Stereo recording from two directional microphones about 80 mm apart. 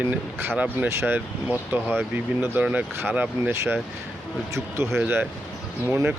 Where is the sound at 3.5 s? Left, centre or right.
Right.